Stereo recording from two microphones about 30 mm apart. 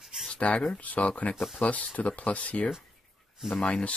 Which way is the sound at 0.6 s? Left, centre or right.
Left.